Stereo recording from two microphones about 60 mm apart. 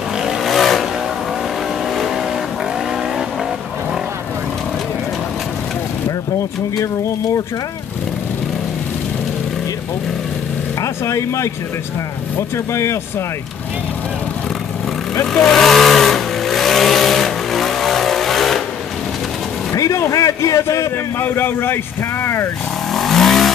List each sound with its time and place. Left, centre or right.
0.2 s vehicle: centre
10.8 s speech: left
15.3 s vehicle: centre
19.7 s a sound: left
21.2 s a man's voice: left
22.2 s vehicle: left
22.9 s vehicle: centre